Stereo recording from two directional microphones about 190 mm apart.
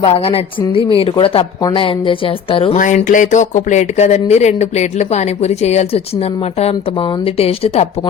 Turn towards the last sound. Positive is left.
turn(degrees=30)  # may be behind; listen again after turning